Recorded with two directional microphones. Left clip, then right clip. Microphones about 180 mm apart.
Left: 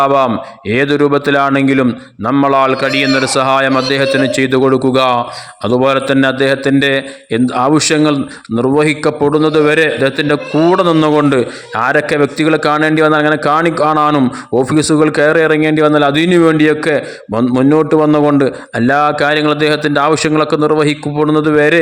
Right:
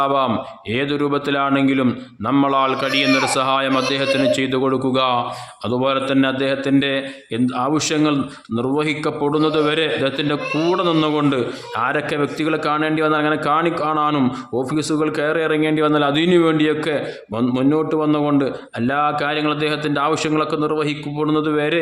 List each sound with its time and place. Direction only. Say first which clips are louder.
0.0 s speech: left 7 dB; 35° left (ahead or behind)